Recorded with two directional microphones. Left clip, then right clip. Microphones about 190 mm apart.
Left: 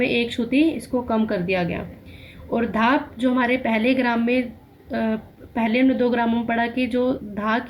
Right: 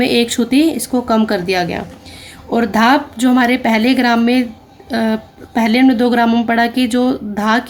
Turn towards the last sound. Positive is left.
turn(degrees=-55)  # may be behind; listen again after turning